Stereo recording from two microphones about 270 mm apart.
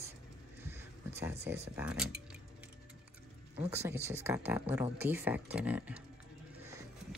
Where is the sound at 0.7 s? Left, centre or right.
Centre.